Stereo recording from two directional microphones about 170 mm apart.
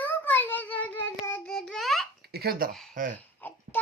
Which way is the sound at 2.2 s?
70° right (ahead or behind).